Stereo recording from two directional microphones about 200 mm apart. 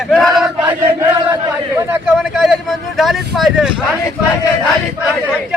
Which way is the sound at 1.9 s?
5° right (ahead or behind).